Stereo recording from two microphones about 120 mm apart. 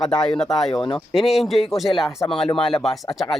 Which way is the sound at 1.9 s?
40° left (ahead or behind).